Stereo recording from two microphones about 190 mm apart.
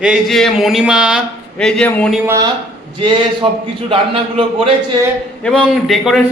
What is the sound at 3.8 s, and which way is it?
Speech, 30° right (ahead or behind).